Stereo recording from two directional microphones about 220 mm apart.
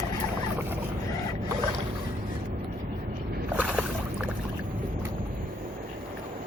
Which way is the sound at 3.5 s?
5° right (ahead or behind).